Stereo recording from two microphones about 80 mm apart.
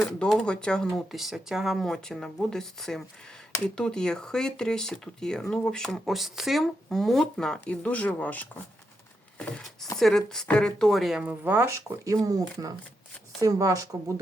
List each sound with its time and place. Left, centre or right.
0.2 s speech: centre
1.1 s speech: centre
7.7 s speech: centre
10.0 s speech: centre
11.3 s speech: right
12.0 s speech: right